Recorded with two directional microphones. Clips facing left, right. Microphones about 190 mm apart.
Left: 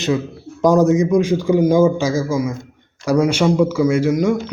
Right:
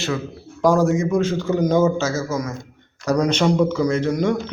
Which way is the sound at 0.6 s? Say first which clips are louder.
Left 4 dB; 20° left (ahead or behind).